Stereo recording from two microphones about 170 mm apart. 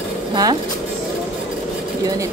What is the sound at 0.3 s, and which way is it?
Speech, 25° right (ahead or behind).